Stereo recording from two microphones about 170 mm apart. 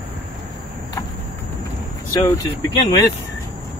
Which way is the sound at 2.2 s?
20° left (ahead or behind).